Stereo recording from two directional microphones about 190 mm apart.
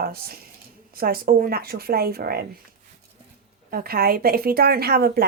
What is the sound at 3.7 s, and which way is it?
Speech, 50° right (ahead or behind).